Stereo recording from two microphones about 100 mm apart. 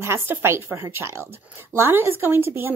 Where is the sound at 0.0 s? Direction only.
25° right (ahead or behind).